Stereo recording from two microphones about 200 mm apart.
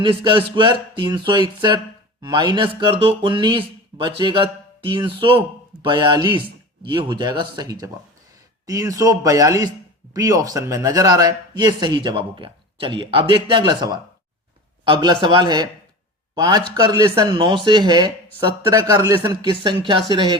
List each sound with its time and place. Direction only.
0.0 s speech: 25° right (ahead or behind)